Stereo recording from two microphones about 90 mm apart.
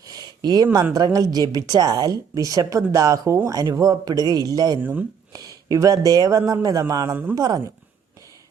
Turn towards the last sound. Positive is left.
turn(degrees=-45)  # may be behind; listen again after turning